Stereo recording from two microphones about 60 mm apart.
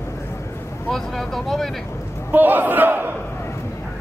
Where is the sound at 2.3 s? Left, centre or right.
Right.